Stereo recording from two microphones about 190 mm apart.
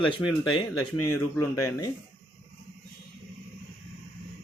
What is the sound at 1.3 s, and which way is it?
Speech, 15° left (ahead or behind).